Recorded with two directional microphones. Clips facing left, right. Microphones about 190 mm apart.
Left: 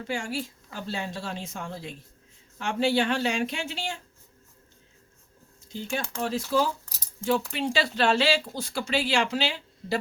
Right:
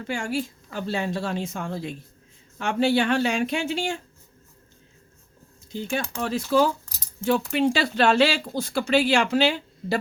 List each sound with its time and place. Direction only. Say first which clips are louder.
0.1 s a woman's voice: right 4 dB; 55° right (ahead or behind)
5.9 s a woman's voice: right 2 dB; 60° right (ahead or behind)